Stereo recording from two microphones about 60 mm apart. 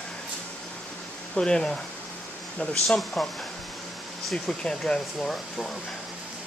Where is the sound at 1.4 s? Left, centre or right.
Centre.